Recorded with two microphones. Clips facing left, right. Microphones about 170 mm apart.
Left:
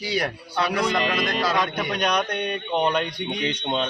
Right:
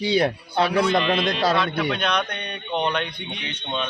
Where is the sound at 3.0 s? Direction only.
40° left (ahead or behind).